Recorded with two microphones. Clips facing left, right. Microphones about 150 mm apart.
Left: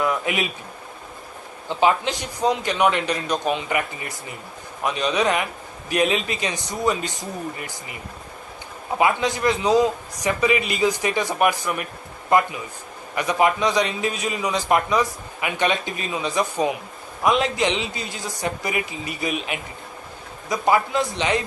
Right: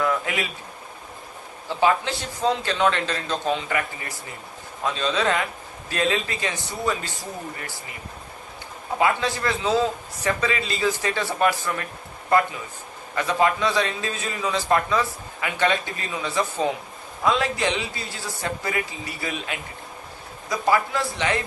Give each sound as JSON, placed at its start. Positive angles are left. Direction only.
{"t": 0.0, "sound": "a sound", "side_deg": 20}
{"t": 1.8, "sound": "a man's voice", "side_deg": 15}
{"t": 9.0, "sound": "a man's voice", "side_deg": 20}
{"t": 13.1, "sound": "a man's voice", "side_deg": 15}